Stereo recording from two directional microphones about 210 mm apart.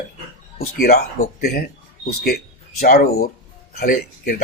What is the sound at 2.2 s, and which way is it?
Speech, 45° left (ahead or behind).